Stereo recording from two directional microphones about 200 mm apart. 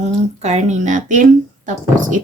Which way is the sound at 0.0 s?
35° right (ahead or behind).